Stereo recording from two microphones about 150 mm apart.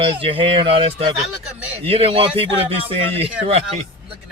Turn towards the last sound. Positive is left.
turn(degrees=-40)  # may be behind; listen again after turning